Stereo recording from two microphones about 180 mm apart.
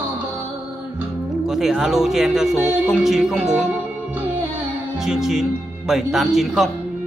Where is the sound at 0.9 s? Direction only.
Centre (ahead or behind).